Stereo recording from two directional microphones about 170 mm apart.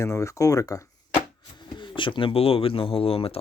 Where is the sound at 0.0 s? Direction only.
15° left (ahead or behind).